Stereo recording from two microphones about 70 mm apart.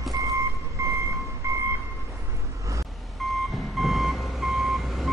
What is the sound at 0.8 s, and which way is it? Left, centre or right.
Train, right.